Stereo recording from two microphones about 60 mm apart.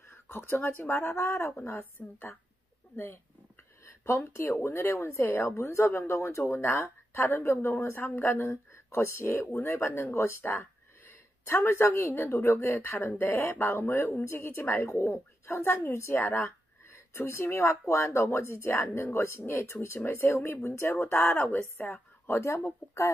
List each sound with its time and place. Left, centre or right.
0.1 s speech: left
3.8 s a woman's voice: left
15.9 s a woman's voice: left
16.2 s speech: left
20.9 s a woman's voice: left